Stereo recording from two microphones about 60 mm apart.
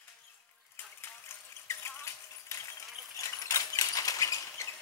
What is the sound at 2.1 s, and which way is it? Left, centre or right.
Music, left.